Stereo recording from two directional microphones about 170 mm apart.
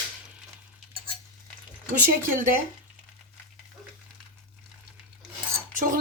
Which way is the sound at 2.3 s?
55° right (ahead or behind).